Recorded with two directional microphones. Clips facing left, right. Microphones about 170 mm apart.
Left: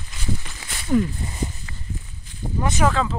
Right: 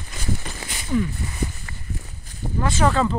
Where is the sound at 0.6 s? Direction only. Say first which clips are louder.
Right 3 dB; 50° right (ahead or behind).